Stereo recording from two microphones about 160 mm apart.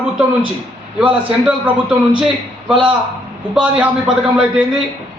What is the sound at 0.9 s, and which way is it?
A man's voice, 10° right (ahead or behind).